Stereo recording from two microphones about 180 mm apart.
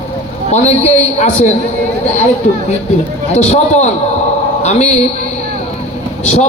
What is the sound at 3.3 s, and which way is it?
A man's voice, 40° left (ahead or behind).